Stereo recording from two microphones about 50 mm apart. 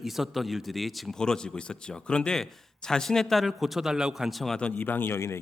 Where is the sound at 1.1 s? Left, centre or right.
Centre.